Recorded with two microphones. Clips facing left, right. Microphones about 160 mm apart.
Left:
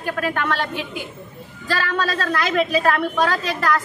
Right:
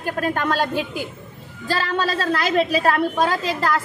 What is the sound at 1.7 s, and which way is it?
A woman's voice, 25° right (ahead or behind).